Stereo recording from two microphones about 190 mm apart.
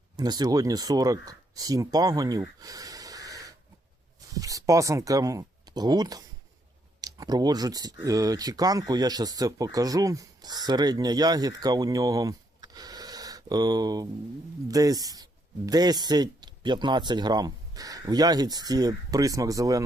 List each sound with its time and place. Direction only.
0.2 s speech: 20° right (ahead or behind)